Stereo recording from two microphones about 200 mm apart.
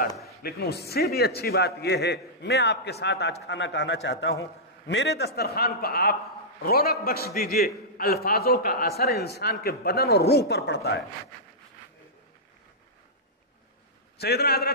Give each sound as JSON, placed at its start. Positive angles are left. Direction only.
{"t": 0.4, "sound": "a man's voice", "side_deg": 50}
{"t": 14.2, "sound": "a man's voice", "side_deg": 50}